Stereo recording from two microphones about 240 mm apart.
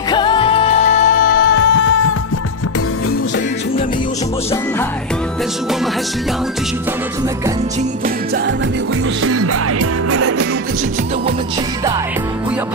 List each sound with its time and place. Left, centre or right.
0.1 s music: centre; by 2.0 s left
9.2 s music: right